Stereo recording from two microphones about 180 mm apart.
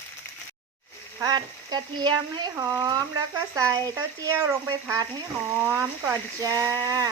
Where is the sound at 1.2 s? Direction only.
20° right (ahead or behind).